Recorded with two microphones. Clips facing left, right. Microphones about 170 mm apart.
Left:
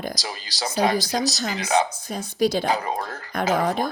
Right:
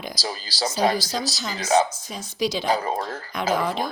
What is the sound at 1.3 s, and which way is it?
Speech, 45° left (ahead or behind).